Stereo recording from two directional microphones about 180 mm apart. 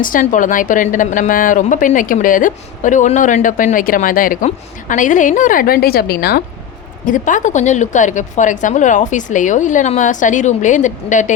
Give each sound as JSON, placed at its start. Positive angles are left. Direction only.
{"t": 0.0, "sound": "a woman's voice", "side_deg": 45}
{"t": 7.0, "sound": "a woman's voice", "side_deg": 45}